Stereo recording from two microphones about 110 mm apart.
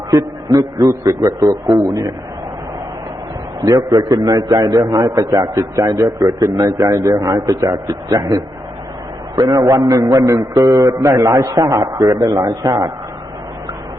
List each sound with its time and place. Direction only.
0.1 s a man's voice: 35° right (ahead or behind)
3.6 s a man's voice: 35° right (ahead or behind)